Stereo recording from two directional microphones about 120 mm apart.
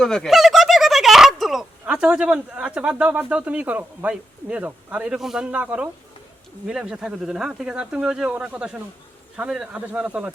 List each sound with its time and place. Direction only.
0.0 s speech: 5° left (ahead or behind)